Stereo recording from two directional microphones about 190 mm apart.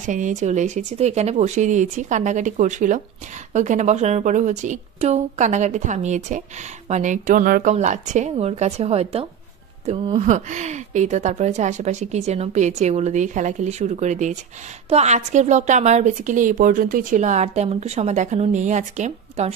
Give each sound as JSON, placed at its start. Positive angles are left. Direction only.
{"t": 0.0, "sound": "a woman's voice", "side_deg": -40}